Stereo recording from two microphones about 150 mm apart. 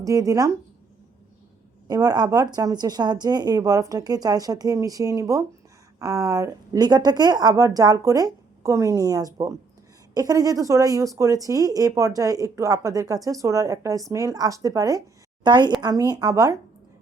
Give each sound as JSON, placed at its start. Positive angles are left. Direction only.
{"t": 0.0, "sound": "speech", "side_deg": -25}
{"t": 1.9, "sound": "a woman's voice", "side_deg": -25}